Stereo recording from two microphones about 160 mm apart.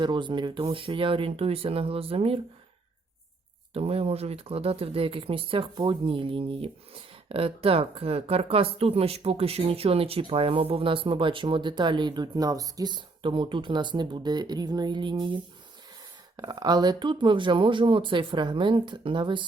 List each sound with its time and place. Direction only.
0.0 s speech: 30° right (ahead or behind)
3.8 s speech: 40° right (ahead or behind)
16.4 s speech: 25° right (ahead or behind)